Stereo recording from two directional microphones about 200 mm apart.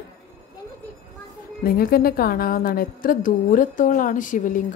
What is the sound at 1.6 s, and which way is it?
A woman's voice, 45° left (ahead or behind).